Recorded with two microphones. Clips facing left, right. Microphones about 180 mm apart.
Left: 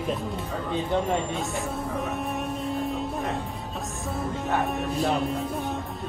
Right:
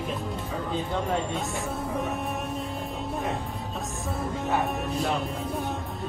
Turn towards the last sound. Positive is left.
turn(degrees=0)  # may be behind; listen again after turning